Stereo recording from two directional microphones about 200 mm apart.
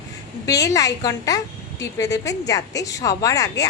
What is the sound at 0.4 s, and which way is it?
Speech, 15° left (ahead or behind).